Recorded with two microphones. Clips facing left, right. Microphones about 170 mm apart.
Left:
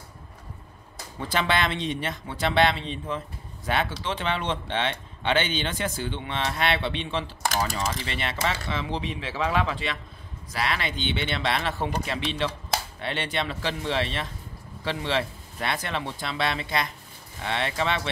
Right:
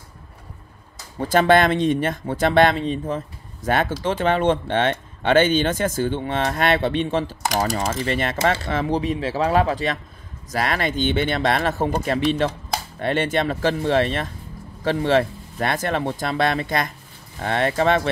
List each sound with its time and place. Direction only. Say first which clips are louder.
1.2 s speech: right 10 dB; 45° right (ahead or behind)